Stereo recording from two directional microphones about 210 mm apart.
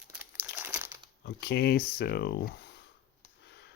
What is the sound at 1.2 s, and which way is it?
Speech, 55° left (ahead or behind).